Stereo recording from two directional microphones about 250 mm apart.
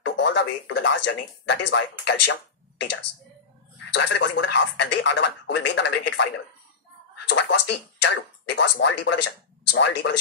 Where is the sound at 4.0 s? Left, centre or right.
Left.